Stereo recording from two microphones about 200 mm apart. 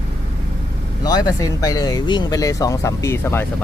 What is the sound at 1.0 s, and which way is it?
Speech, 20° left (ahead or behind).